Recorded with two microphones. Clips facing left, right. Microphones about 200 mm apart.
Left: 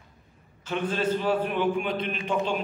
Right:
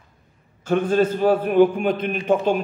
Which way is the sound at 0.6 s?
45° right (ahead or behind).